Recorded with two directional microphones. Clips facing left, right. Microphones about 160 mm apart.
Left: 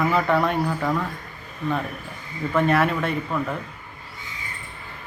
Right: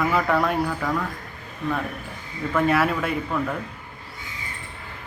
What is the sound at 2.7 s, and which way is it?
Speech, 5° right (ahead or behind).